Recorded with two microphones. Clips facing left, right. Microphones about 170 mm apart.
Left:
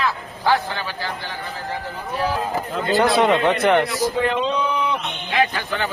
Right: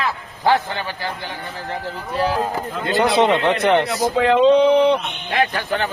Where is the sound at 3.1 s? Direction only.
20° right (ahead or behind).